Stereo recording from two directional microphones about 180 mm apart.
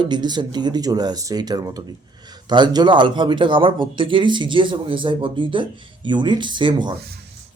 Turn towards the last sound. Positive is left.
turn(degrees=-25)  # may be behind; listen again after turning